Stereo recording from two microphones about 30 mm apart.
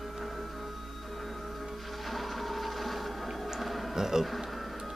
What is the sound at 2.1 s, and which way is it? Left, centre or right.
Music, centre.